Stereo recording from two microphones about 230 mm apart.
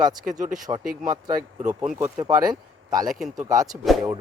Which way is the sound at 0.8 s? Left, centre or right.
Right.